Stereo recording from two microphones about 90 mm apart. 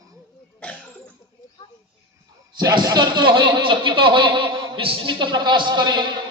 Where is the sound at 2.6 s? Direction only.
50° right (ahead or behind).